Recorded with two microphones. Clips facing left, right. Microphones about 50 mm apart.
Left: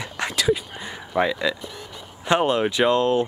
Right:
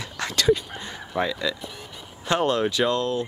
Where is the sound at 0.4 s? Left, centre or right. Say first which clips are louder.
Right 2 dB; centre.